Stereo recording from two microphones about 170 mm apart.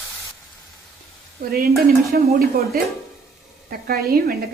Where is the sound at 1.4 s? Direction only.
60° right (ahead or behind).